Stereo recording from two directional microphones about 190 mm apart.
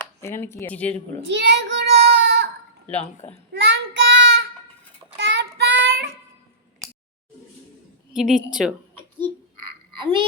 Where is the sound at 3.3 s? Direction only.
70° right (ahead or behind).